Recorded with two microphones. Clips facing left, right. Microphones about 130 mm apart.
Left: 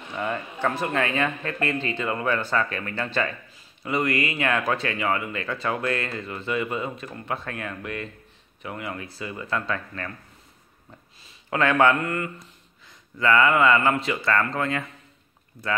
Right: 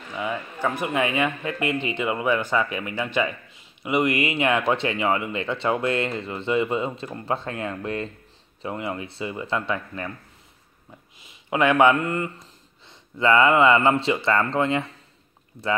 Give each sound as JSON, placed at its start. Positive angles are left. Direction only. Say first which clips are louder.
{"t": 0.1, "sound": "a man's voice", "louder": "even", "side_deg": -5}
{"t": 11.1, "sound": "speech", "louder": "right 2 dB", "side_deg": -15}